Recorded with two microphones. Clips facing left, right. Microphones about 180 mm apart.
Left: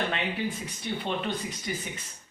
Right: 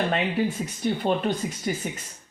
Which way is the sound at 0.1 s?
40° right (ahead or behind).